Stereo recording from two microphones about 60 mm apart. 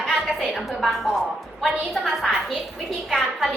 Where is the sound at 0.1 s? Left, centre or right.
Centre.